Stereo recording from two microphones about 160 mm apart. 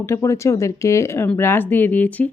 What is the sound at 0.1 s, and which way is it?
A woman's voice, 20° left (ahead or behind).